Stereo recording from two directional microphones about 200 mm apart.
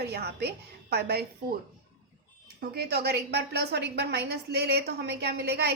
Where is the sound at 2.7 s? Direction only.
55° right (ahead or behind).